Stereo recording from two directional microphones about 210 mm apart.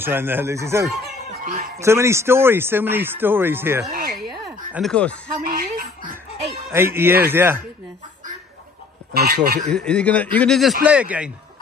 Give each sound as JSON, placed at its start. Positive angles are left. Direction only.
{"t": 0.0, "sound": "speech", "side_deg": -10}
{"t": 1.4, "sound": "speech", "side_deg": -40}
{"t": 1.8, "sound": "speech", "side_deg": -15}
{"t": 3.9, "sound": "a sound", "side_deg": -50}
{"t": 4.7, "sound": "speech", "side_deg": 5}
{"t": 5.4, "sound": "music", "side_deg": -45}
{"t": 6.7, "sound": "speech", "side_deg": -10}
{"t": 9.2, "sound": "speech", "side_deg": -45}
{"t": 9.7, "sound": "speech", "side_deg": 5}